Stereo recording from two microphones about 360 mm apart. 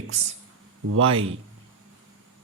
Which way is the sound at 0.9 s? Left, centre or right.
Right.